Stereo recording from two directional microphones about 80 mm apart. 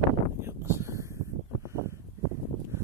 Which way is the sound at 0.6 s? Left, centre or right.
Right.